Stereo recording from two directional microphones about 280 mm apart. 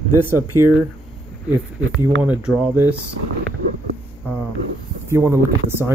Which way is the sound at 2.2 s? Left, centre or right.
Centre.